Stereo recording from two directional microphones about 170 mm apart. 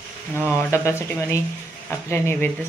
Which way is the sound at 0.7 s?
15° left (ahead or behind).